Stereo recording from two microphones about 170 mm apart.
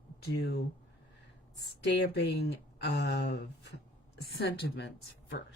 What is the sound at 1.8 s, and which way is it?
Speech, 90° left.